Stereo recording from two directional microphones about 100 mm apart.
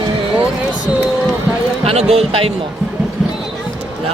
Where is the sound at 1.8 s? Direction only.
90° right.